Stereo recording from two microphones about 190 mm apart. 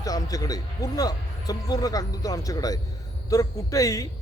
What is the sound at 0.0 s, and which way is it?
Speech, 20° left (ahead or behind).